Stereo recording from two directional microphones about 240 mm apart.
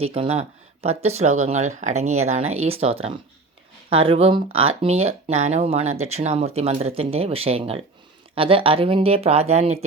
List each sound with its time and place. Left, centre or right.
0.0 s speech: right